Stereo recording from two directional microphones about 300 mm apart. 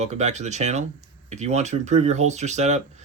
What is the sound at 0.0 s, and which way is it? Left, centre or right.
Speech, right.